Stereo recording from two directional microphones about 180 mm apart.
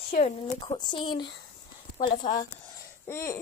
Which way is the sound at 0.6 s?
25° left (ahead or behind).